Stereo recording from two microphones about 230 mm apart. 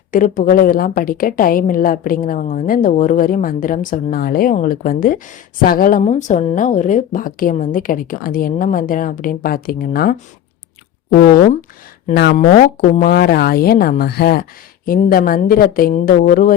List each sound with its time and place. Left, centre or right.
0.1 s a woman's voice: left
12.1 s a woman's voice: left